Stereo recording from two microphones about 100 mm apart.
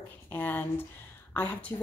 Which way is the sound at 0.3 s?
20° left (ahead or behind).